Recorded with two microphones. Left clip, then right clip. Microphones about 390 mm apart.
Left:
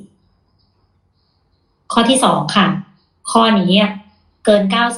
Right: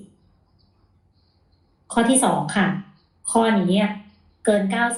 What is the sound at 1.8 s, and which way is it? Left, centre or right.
A woman's voice, left.